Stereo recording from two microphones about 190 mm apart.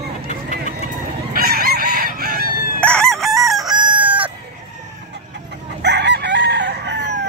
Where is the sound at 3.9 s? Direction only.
10° right (ahead or behind).